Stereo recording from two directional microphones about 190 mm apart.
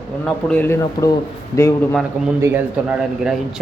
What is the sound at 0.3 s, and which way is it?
A man's voice, 5° left (ahead or behind).